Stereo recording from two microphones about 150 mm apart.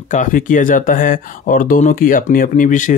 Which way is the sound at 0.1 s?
60° left (ahead or behind).